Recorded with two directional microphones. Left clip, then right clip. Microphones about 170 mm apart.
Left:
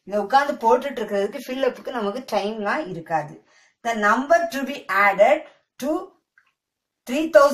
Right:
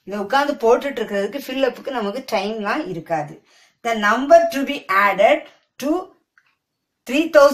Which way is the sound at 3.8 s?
20° right (ahead or behind).